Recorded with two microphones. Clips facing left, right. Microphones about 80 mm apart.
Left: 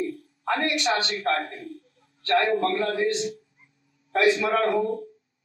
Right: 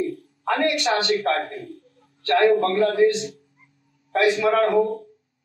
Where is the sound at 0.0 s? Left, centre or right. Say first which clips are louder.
Right 3 dB; right.